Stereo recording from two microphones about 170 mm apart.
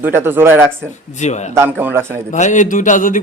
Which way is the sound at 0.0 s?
10° right (ahead or behind).